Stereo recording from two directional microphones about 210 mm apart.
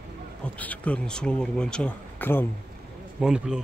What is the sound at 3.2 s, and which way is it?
Speech, 5° right (ahead or behind).